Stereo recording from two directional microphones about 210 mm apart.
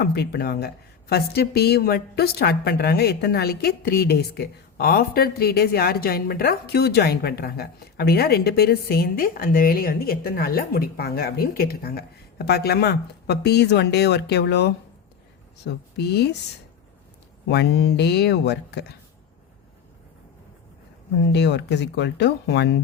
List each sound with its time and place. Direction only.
0.0 s a woman's voice: 50° left (ahead or behind)
17.5 s a woman's voice: 55° left (ahead or behind)
21.3 s a woman's voice: 55° left (ahead or behind)